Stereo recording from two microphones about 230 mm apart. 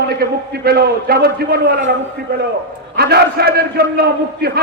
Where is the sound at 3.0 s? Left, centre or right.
Right.